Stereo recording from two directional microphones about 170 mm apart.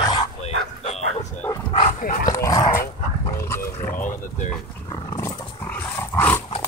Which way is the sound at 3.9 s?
50° left (ahead or behind).